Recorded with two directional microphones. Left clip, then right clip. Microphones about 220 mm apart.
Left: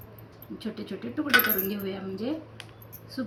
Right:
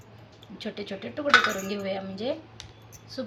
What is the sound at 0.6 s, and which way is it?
A woman's voice, 50° right (ahead or behind).